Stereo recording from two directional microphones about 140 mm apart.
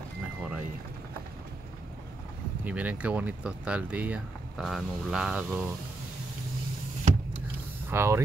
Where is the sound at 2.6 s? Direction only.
10° right (ahead or behind).